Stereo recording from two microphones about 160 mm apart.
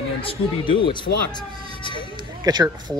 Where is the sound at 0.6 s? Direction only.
30° left (ahead or behind).